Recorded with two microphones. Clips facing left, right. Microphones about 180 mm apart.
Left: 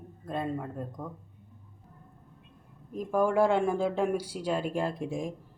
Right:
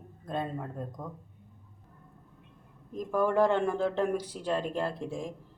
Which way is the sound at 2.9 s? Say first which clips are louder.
Left 1 dB; 10° left (ahead or behind).